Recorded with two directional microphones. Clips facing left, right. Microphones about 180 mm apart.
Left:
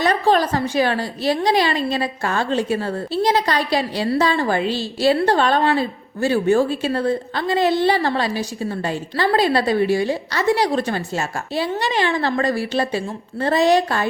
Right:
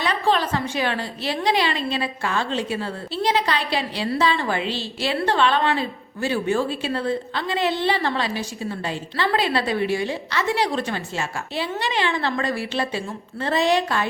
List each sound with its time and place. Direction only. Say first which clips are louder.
0.0 s a woman's voice: left 5 dB; 40° left (ahead or behind)